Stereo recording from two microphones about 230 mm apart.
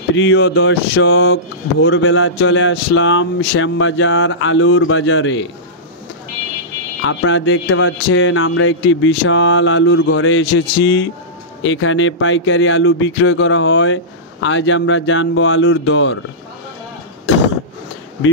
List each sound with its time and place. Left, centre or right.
0.1 s speech: left
7.0 s speech: left